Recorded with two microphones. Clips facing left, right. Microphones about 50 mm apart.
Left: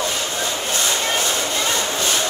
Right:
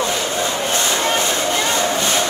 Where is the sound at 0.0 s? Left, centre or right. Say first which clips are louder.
Right 4 dB; right.